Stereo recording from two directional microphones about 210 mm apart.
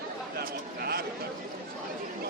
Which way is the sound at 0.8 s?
45° right (ahead or behind).